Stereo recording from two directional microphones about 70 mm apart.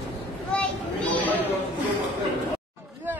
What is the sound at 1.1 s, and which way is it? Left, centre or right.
Chatter, left.